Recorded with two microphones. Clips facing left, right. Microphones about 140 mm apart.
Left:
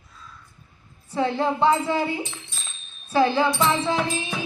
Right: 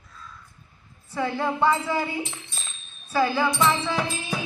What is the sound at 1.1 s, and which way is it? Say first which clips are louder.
Speech: left 3 dB; 25° left (ahead or behind).